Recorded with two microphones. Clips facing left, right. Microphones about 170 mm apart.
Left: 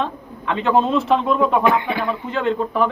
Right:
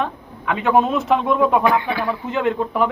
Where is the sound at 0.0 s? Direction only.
10° right (ahead or behind).